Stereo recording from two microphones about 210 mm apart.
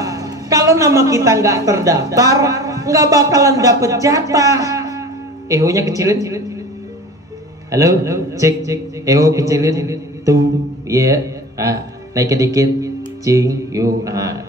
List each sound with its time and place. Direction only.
0.0 s a woman's voice: 15° right (ahead or behind)
7.7 s a man's voice: 15° right (ahead or behind)